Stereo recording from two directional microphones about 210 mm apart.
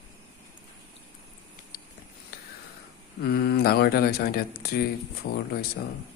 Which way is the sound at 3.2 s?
45° left (ahead or behind).